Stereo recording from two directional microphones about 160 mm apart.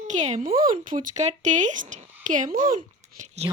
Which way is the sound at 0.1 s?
45° right (ahead or behind).